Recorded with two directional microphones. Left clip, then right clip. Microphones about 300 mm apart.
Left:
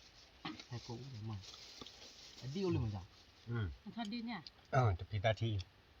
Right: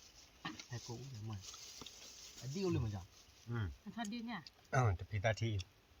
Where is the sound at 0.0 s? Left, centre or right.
Centre.